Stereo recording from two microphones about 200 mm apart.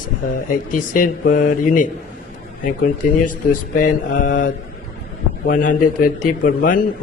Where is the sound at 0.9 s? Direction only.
45° left (ahead or behind).